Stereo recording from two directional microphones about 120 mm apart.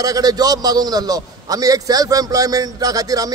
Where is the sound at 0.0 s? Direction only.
30° right (ahead or behind).